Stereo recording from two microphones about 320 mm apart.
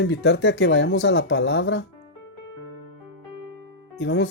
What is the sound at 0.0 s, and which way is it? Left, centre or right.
Speech, left.